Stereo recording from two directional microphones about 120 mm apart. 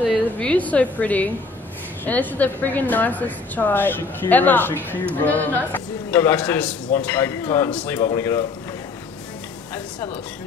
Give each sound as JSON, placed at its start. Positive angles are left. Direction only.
{"t": 0.0, "sound": "a woman's voice", "side_deg": 5}
{"t": 8.0, "sound": "speech", "side_deg": 20}